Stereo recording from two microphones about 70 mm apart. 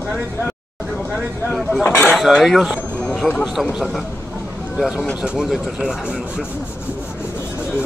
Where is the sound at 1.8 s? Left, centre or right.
Left.